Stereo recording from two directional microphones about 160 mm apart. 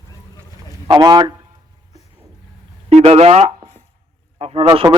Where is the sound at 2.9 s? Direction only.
40° right (ahead or behind).